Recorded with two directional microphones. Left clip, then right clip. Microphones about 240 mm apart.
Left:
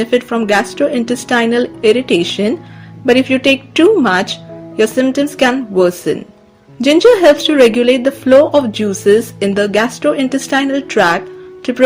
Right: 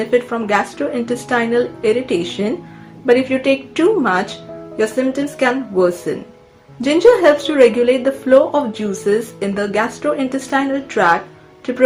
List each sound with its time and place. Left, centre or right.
0.0 s a woman's voice: left